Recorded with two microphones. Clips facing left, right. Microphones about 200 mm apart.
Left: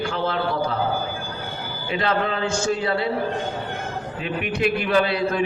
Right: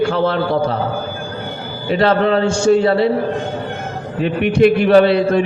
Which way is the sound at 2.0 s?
35° right (ahead or behind).